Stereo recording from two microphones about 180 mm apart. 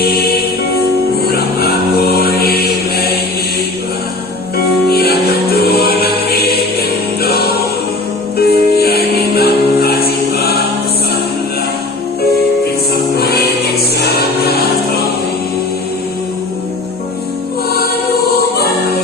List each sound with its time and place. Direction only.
1.3 s music: 60° left (ahead or behind)
4.5 s music: 60° left (ahead or behind)
13.1 s music: 60° left (ahead or behind)